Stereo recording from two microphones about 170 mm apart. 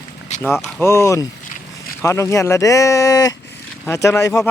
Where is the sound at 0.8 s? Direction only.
15° left (ahead or behind).